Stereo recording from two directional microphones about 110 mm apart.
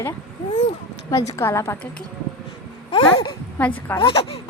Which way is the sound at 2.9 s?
50° left (ahead or behind).